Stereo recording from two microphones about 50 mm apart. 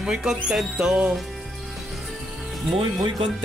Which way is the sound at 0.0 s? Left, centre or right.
Centre.